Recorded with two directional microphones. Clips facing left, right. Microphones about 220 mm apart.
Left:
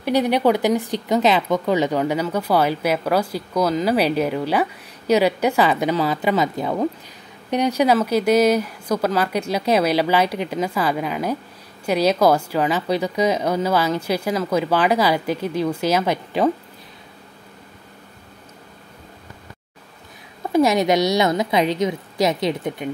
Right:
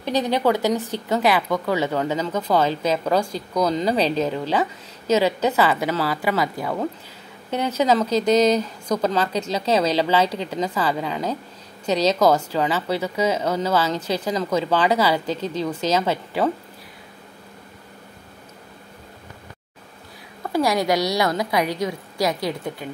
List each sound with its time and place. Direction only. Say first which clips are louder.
0.0 s speech: left 3 dB; 10° left (ahead or behind)
20.5 s a woman's voice: left 4 dB; 20° left (ahead or behind)